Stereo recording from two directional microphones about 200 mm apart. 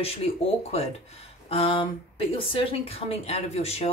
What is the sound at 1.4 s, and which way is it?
A woman's voice, 30° left (ahead or behind).